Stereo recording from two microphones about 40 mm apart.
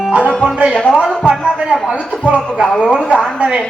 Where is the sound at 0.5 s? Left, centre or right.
Right.